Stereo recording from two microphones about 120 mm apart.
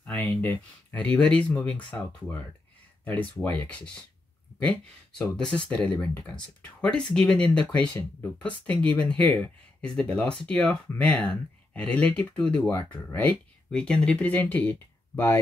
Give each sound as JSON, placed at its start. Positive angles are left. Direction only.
{"t": 0.0, "sound": "a sound", "side_deg": 10}
{"t": 0.4, "sound": "speech", "side_deg": 10}
{"t": 12.6, "sound": "speech", "side_deg": 20}